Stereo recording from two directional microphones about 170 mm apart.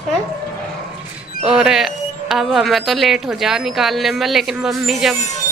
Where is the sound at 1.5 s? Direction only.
5° right (ahead or behind).